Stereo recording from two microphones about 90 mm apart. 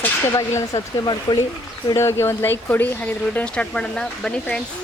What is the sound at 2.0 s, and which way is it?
Speech, 30° left (ahead or behind).